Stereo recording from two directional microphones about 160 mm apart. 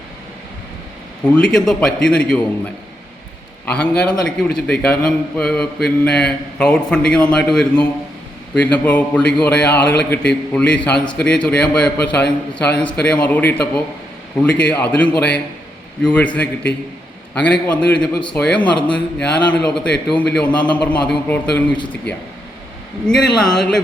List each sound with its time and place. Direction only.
1.2 s a man's voice: 5° left (ahead or behind)
3.7 s a man's voice: 5° left (ahead or behind)
22.1 s speech: 90° left
23.1 s a man's voice: 5° left (ahead or behind)